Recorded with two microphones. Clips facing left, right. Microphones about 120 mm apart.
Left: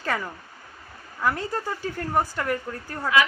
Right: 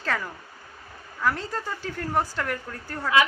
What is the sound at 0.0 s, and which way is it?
Speech, 10° left (ahead or behind).